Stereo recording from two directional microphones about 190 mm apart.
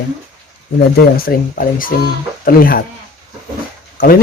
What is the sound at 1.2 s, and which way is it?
Speech, 50° left (ahead or behind).